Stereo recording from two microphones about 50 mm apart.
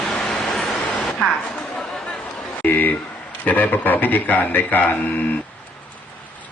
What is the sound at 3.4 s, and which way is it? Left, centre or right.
A man's voice, left.